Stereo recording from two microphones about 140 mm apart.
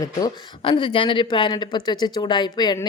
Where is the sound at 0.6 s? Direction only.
40° left (ahead or behind).